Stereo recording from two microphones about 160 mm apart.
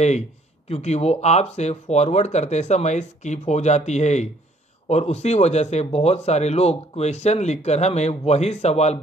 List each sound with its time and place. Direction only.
0.7 s speech: 40° left (ahead or behind)